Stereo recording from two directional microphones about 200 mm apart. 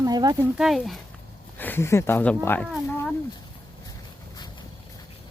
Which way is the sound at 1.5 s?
10° left (ahead or behind).